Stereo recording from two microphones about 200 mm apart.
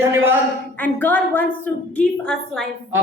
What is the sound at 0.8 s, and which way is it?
A woman's voice, 10° left (ahead or behind).